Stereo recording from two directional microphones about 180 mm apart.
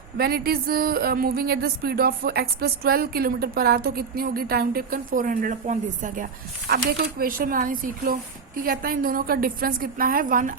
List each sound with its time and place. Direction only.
0.2 s speech: 60° right (ahead or behind)
6.7 s a woman's voice: 60° right (ahead or behind)